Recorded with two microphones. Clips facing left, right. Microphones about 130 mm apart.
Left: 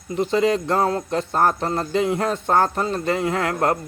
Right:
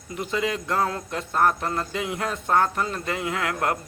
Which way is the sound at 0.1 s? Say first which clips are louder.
Left 8 dB; 30° left (ahead or behind).